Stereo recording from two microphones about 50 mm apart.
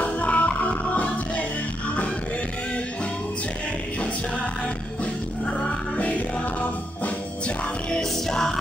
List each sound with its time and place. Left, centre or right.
0.0 s music: left
5.6 s music: left
7.4 s music: centre